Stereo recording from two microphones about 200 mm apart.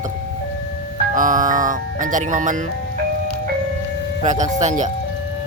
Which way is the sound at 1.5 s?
40° right (ahead or behind).